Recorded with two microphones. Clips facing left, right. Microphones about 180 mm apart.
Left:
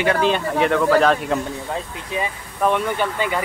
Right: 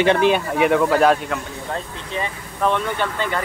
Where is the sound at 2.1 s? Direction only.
10° left (ahead or behind).